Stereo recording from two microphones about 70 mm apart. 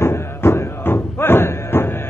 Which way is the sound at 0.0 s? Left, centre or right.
Left.